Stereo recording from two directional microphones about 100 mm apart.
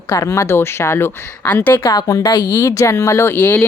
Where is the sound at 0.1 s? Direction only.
30° left (ahead or behind).